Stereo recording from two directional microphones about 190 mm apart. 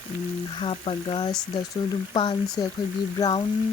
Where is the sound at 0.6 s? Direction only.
30° left (ahead or behind).